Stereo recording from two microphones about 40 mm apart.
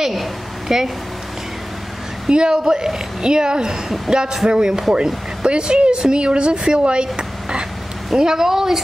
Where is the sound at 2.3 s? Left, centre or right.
Right.